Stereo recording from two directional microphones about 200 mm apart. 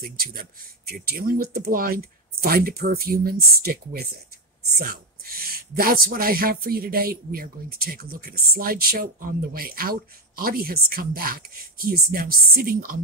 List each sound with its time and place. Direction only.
0.0 s speech: 50° right (ahead or behind)